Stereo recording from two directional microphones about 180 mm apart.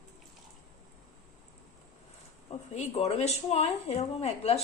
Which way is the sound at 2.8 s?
35° left (ahead or behind).